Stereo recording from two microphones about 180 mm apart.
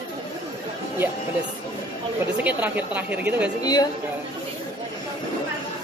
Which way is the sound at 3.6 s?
20° left (ahead or behind).